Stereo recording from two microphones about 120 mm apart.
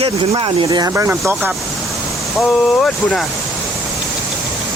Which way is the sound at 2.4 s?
5° left (ahead or behind).